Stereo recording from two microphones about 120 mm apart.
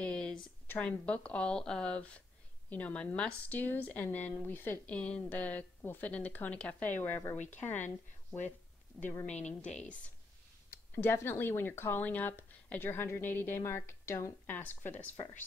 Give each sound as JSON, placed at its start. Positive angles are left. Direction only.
{"t": 0.0, "sound": "a sound", "side_deg": 5}
{"t": 0.7, "sound": "speech", "side_deg": 10}
{"t": 9.0, "sound": "a woman's voice", "side_deg": -5}
{"t": 9.3, "sound": "a woman's voice", "side_deg": 70}
{"t": 9.6, "sound": "speech", "side_deg": 10}